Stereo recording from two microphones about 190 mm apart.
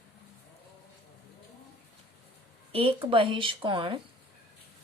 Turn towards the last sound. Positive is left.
turn(degrees=-25)  # may be behind; listen again after turning